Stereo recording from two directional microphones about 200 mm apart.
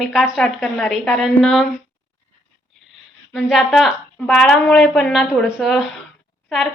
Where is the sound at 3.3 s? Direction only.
Centre (ahead or behind).